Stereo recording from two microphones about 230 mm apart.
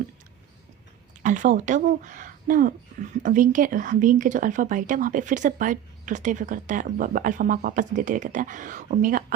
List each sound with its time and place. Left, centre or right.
1.2 s speech: right